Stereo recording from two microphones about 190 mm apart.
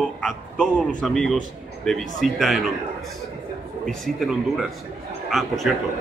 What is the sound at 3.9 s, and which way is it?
Speech, centre (ahead or behind).